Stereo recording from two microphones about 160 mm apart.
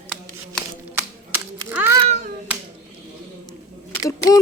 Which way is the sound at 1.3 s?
15° right (ahead or behind).